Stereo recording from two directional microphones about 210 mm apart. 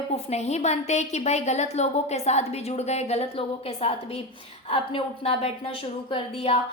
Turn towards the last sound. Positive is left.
turn(degrees=25)  # may be behind; listen again after turning